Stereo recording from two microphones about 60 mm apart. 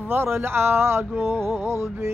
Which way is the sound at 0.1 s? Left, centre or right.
Right.